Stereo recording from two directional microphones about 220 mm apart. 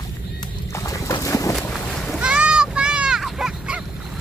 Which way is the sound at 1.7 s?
Centre (ahead or behind).